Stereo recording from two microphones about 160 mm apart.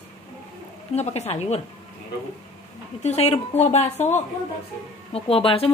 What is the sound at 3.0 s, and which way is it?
Speech, 45° left (ahead or behind).